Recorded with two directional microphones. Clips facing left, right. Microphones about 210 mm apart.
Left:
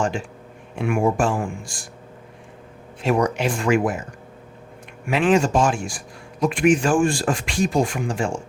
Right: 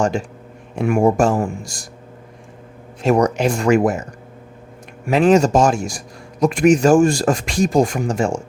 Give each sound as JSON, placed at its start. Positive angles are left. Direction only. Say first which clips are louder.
{"t": 0.0, "sound": "speech", "louder": "right 5 dB", "side_deg": -40}
{"t": 3.0, "sound": "speech", "louder": "right 5 dB", "side_deg": -40}
{"t": 5.0, "sound": "speech", "louder": "right 5 dB", "side_deg": -40}